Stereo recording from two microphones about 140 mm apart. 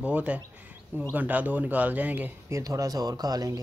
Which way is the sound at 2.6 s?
25° right (ahead or behind).